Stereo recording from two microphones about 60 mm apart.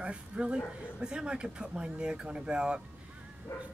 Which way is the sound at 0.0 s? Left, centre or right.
Centre.